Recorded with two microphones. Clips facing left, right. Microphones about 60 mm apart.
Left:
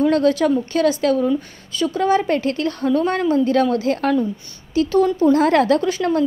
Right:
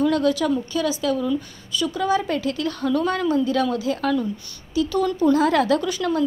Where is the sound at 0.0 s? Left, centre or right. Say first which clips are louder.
Left 4 dB; left.